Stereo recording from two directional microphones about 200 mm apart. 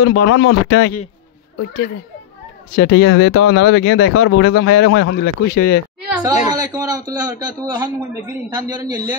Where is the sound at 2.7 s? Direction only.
50° left (ahead or behind).